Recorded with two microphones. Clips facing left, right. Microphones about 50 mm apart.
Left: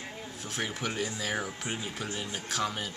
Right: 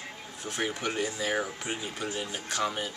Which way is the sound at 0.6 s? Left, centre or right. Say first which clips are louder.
Right 2 dB; centre.